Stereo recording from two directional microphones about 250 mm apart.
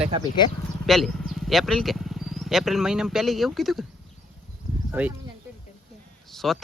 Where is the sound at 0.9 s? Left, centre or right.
Centre.